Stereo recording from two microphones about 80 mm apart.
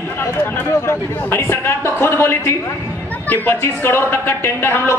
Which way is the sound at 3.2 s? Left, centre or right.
Left.